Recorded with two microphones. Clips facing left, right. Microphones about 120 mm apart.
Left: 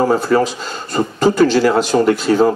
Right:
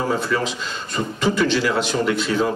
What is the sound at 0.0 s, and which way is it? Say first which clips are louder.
Speech: left 8 dB; 40° left (ahead or behind).